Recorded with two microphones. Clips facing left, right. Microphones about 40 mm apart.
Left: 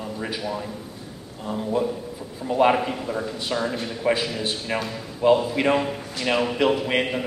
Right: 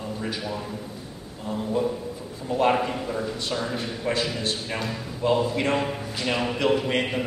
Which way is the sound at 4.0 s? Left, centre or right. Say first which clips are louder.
Left 4 dB; centre.